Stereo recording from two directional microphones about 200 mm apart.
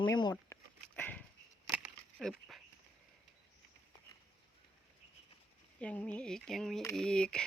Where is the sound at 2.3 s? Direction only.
Centre (ahead or behind).